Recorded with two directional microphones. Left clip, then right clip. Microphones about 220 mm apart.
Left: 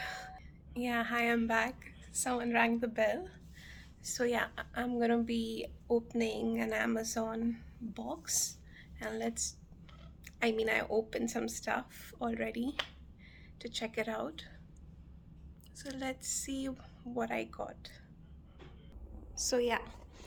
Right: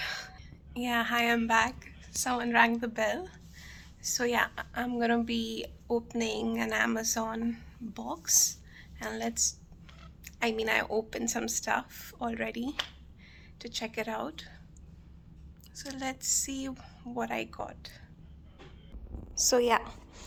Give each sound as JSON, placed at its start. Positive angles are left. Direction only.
{"t": 0.0, "sound": "a sound", "side_deg": 10}
{"t": 2.2, "sound": "a woman's voice", "side_deg": 10}
{"t": 15.7, "sound": "a woman's voice", "side_deg": 10}
{"t": 19.4, "sound": "a woman's voice", "side_deg": 0}